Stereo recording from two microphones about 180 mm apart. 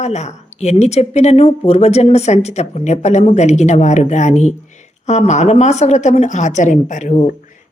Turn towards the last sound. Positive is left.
turn(degrees=45)  # may be behind; listen again after turning